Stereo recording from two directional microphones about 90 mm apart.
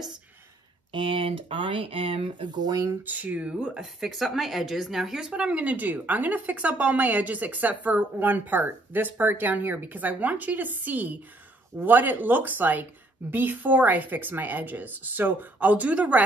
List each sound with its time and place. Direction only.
0.9 s speech: 75° right (ahead or behind); by 2.9 s 45° right (ahead or behind)
3.0 s a woman's voice: 20° right (ahead or behind)